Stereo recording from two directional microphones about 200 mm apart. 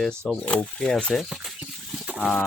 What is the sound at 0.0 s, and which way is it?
Speech, 5° left (ahead or behind).